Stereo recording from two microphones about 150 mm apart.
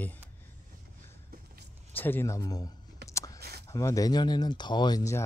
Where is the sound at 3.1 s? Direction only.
20° left (ahead or behind).